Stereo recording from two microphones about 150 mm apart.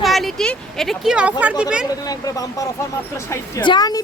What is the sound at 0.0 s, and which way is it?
Speech, centre (ahead or behind).